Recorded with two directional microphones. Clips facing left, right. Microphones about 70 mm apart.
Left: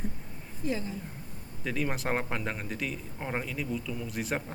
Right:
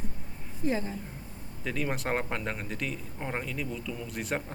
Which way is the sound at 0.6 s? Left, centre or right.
Right.